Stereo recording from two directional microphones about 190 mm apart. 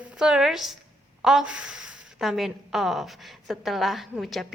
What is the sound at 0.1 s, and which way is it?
A woman's voice, 5° right (ahead or behind).